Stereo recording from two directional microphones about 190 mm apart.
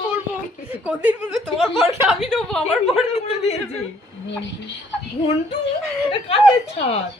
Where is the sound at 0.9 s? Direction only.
5° right (ahead or behind).